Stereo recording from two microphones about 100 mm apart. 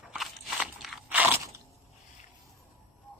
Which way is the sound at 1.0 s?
20° right (ahead or behind).